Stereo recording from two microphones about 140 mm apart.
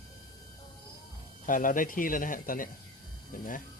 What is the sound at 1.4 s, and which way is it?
Speech, 70° left (ahead or behind).